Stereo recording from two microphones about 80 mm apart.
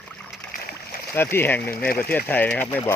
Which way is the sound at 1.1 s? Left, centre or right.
Left.